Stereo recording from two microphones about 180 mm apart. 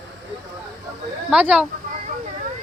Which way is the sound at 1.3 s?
5° right (ahead or behind).